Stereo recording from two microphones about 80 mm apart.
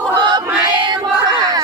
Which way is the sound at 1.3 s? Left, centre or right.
Right.